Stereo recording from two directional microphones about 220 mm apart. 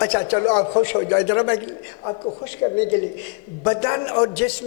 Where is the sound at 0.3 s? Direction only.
25° left (ahead or behind).